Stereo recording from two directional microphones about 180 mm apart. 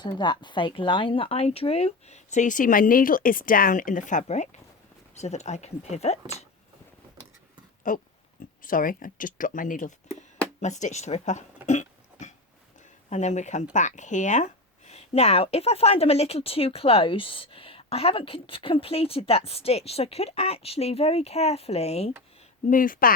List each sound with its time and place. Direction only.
0.0 s speech: 25° left (ahead or behind)
7.9 s speech: 45° left (ahead or behind)
10.6 s cough: 40° left (ahead or behind)
13.1 s speech: 40° left (ahead or behind)
22.7 s speech: 50° left (ahead or behind)